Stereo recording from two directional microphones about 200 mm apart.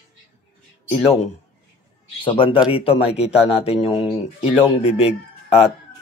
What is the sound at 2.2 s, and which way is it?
Speech, 25° left (ahead or behind).